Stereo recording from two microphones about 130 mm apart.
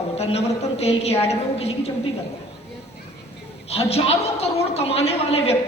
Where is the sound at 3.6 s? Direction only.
50° left (ahead or behind).